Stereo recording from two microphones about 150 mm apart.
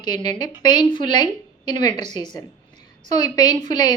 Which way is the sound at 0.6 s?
30° left (ahead or behind).